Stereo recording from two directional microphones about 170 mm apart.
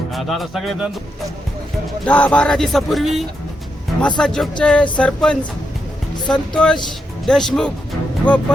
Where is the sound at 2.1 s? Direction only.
5° left (ahead or behind).